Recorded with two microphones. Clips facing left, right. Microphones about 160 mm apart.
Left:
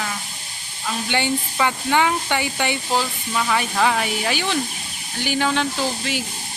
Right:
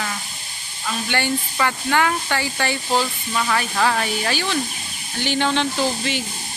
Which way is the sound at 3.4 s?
5° left (ahead or behind).